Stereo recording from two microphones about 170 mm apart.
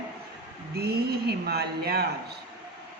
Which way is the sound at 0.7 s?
70° right (ahead or behind).